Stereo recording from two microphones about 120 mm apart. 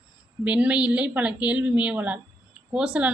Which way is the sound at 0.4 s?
10° right (ahead or behind).